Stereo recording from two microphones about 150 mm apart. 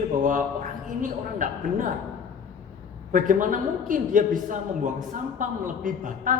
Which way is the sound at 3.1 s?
60° right (ahead or behind).